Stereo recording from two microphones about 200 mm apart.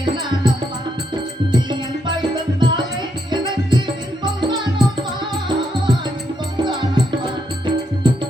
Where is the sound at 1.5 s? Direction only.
20° right (ahead or behind).